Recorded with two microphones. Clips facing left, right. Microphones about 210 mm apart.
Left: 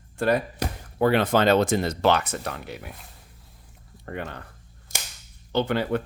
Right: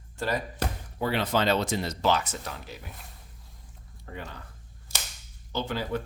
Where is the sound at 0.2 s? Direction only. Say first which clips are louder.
Left 6 dB; 60° left (ahead or behind).